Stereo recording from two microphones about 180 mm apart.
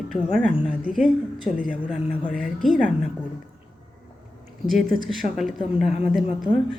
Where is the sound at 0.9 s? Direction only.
45° left (ahead or behind).